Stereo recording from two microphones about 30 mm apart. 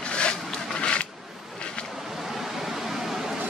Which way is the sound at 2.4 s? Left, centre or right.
Centre.